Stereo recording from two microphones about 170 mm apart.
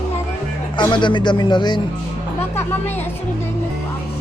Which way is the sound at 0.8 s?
25° left (ahead or behind).